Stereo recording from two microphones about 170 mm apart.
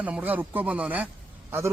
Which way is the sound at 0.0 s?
10° right (ahead or behind).